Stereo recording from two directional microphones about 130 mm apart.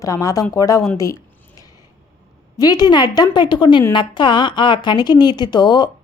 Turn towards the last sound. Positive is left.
turn(degrees=35)  # may be behind; listen again after turning